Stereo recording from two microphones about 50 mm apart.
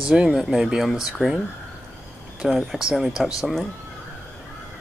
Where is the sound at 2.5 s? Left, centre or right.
Centre.